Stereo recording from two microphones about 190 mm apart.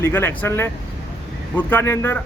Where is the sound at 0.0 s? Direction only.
10° left (ahead or behind).